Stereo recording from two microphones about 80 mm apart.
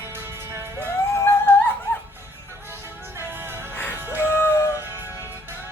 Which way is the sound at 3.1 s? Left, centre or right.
Right.